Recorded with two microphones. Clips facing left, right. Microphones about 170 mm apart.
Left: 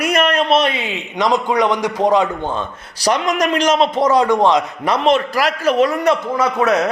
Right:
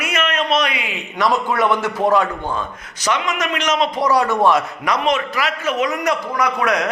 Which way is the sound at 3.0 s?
40° left (ahead or behind).